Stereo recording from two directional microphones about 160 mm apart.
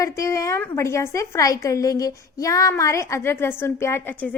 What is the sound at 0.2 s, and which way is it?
A woman's voice, 20° left (ahead or behind).